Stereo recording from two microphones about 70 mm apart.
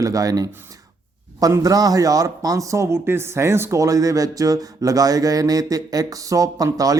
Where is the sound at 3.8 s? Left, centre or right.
Right.